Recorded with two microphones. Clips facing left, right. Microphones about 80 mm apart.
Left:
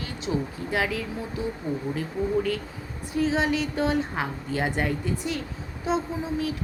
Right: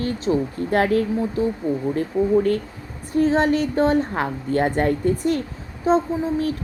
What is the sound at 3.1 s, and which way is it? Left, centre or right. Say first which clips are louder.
A woman's voice: right 6 dB; right.